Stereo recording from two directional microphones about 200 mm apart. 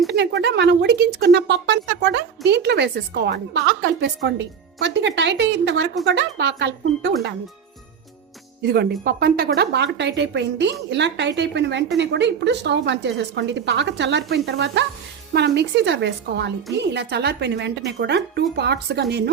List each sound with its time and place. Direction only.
0.1 s speech: 60° right (ahead or behind)
8.7 s speech: 50° right (ahead or behind)